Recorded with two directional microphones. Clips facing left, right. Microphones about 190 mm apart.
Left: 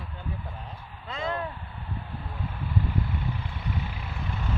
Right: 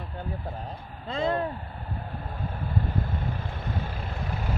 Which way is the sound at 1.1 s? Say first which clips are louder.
Right 5 dB; 35° right (ahead or behind).